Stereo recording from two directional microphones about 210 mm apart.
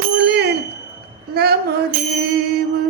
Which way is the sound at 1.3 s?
50° right (ahead or behind).